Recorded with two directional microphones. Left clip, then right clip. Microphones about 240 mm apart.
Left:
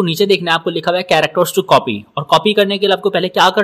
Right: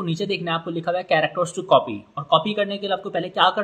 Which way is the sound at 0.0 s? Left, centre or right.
Left.